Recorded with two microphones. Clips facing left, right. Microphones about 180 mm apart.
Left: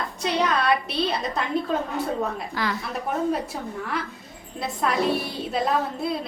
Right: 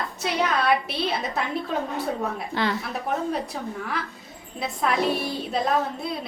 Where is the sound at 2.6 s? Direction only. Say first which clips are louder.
Right 3 dB; 25° right (ahead or behind).